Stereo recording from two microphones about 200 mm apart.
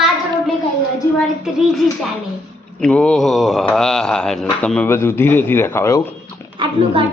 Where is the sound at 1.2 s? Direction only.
Centre (ahead or behind).